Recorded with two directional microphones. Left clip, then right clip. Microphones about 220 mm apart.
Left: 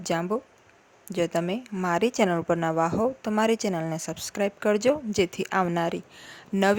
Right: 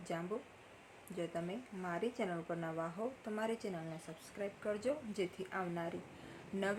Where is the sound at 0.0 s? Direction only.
45° left (ahead or behind).